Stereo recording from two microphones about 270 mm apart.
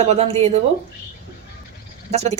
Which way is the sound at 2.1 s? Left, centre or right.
Right.